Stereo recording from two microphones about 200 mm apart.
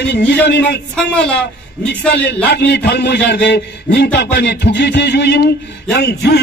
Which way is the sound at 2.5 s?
55° left (ahead or behind).